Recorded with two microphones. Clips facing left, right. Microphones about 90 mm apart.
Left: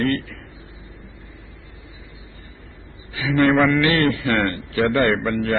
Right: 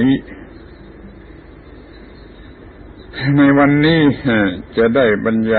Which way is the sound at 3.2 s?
35° right (ahead or behind).